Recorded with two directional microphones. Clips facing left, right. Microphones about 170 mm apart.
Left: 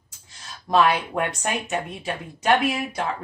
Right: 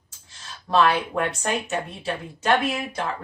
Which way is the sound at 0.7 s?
15° left (ahead or behind).